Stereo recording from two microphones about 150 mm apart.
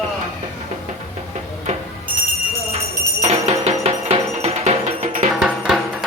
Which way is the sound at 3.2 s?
45° right (ahead or behind).